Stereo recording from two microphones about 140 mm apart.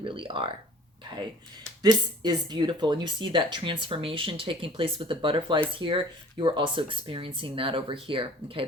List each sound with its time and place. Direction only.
0.0 s speech: 35° right (ahead or behind)
1.8 s speech: 30° right (ahead or behind)